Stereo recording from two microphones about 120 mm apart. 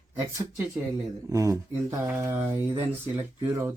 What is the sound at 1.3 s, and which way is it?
A man's voice, 25° right (ahead or behind).